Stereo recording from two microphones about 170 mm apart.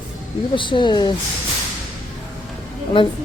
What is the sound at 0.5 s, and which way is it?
Speech, 30° left (ahead or behind).